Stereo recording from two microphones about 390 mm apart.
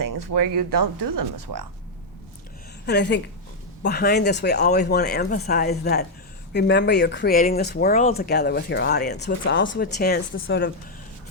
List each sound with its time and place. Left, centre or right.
0.0 s a sound: right
0.7 s speech: right
2.8 s speech: left